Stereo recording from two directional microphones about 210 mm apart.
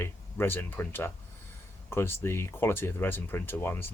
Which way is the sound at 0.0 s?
10° left (ahead or behind).